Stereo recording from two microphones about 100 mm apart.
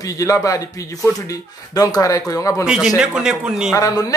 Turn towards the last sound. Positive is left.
turn(degrees=35)  # may be behind; listen again after turning